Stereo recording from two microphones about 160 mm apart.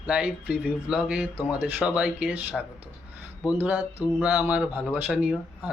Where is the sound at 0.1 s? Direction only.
10° right (ahead or behind).